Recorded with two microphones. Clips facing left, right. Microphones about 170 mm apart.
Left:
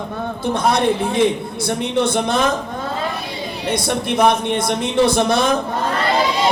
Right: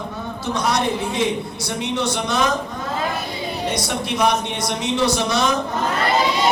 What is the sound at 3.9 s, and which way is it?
A man's voice, 55° left (ahead or behind).